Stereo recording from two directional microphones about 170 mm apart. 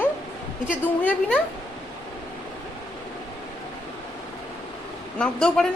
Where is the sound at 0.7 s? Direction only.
10° left (ahead or behind).